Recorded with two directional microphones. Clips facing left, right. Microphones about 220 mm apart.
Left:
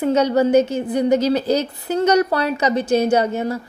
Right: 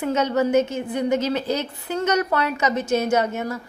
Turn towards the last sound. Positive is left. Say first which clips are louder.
# left 4 dB
turn(degrees=30)  # may be behind; listen again after turning